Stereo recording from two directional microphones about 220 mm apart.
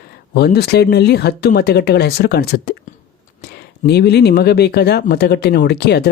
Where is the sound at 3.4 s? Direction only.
45° left (ahead or behind).